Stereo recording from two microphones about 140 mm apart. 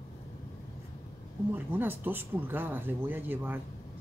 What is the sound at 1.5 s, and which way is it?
Speech, 15° right (ahead or behind).